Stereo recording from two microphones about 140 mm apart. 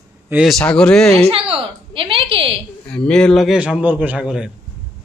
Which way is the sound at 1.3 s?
40° right (ahead or behind).